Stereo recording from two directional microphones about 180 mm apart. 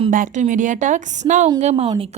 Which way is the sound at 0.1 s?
50° right (ahead or behind).